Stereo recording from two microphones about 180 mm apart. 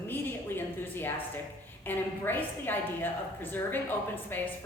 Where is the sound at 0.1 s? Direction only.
10° left (ahead or behind).